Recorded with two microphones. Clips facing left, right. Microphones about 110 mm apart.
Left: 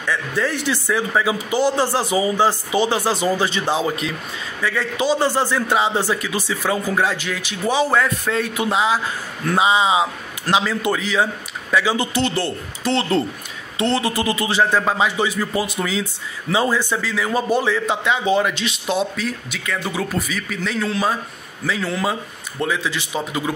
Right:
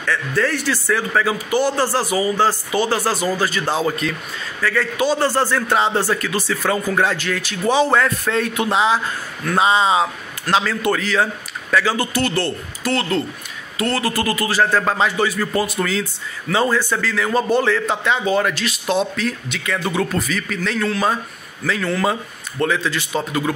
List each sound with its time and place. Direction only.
0.0 s a man's voice: 15° left (ahead or behind)
18.9 s a man's voice: 5° left (ahead or behind)